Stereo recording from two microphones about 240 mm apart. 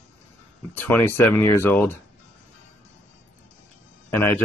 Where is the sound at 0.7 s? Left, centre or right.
Centre.